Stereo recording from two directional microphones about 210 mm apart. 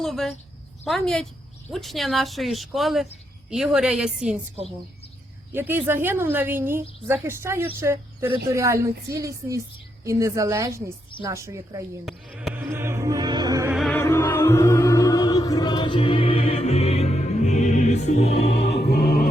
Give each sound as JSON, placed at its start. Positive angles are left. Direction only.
{"t": 0.0, "sound": "a sound", "side_deg": 0}
{"t": 0.9, "sound": "speech", "side_deg": 0}
{"t": 5.5, "sound": "a woman's voice", "side_deg": -10}
{"t": 12.0, "sound": "music", "side_deg": -5}
{"t": 13.7, "sound": "music", "side_deg": 0}
{"t": 14.0, "sound": "music", "side_deg": 10}
{"t": 18.8, "sound": "music", "side_deg": 50}